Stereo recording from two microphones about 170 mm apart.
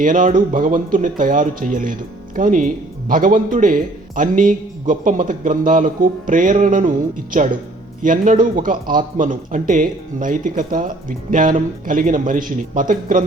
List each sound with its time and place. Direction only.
0.0 s a man's voice: 50° right (ahead or behind)